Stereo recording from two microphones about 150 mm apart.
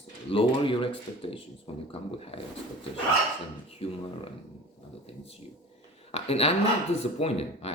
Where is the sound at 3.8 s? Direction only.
40° left (ahead or behind).